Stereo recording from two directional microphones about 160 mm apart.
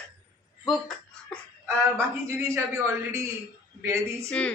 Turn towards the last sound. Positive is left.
turn(degrees=5)  # may be behind; listen again after turning